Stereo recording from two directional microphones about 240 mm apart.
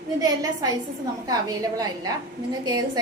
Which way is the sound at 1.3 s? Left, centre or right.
Centre.